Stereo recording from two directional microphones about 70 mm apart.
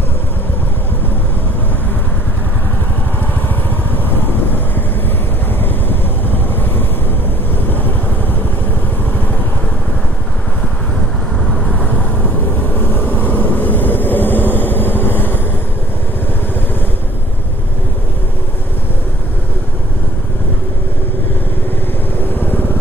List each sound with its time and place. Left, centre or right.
3.9 s vehicle: left
11.5 s vehicle: centre; by 15.4 s left
22.2 s vehicle: left